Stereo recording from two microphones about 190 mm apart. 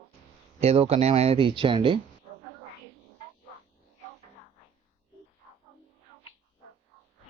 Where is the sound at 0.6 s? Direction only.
35° right (ahead or behind).